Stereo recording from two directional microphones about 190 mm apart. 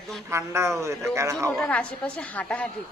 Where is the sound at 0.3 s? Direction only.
15° right (ahead or behind).